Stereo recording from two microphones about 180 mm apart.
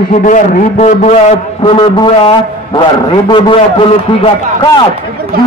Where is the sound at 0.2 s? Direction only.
45° left (ahead or behind).